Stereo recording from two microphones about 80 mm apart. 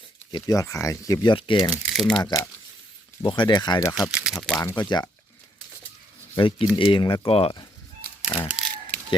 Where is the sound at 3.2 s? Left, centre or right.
Left.